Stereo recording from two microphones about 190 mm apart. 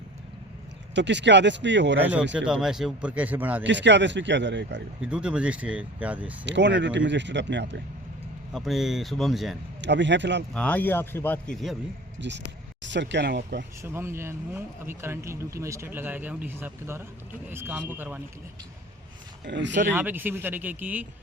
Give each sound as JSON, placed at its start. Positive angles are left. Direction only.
{"t": 0.9, "sound": "speech", "side_deg": -70}
{"t": 2.0, "sound": "speech", "side_deg": -10}
{"t": 3.6, "sound": "speech", "side_deg": -70}
{"t": 5.0, "sound": "speech", "side_deg": -5}
{"t": 6.4, "sound": "speech", "side_deg": -70}
{"t": 8.5, "sound": "speech", "side_deg": 0}
{"t": 9.8, "sound": "speech", "side_deg": -70}
{"t": 10.5, "sound": "a man's voice", "side_deg": 5}
{"t": 12.2, "sound": "speech", "side_deg": -65}
{"t": 13.8, "sound": "speech", "side_deg": -15}
{"t": 19.5, "sound": "speech", "side_deg": -70}
{"t": 19.9, "sound": "speech", "side_deg": -10}